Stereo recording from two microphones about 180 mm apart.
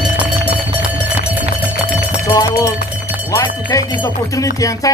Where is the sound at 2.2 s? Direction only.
20° left (ahead or behind).